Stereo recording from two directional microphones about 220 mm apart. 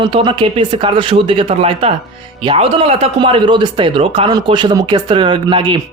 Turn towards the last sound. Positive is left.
turn(degrees=-20)  # may be behind; listen again after turning